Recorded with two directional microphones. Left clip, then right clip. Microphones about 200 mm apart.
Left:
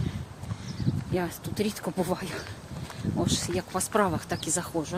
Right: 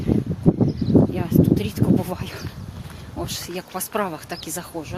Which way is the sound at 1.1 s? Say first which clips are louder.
Right 9 dB; 15° left (ahead or behind).